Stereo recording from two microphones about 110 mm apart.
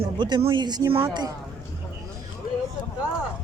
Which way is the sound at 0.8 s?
25° right (ahead or behind).